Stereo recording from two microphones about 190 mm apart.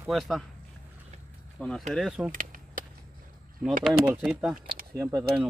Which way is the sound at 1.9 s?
Centre (ahead or behind).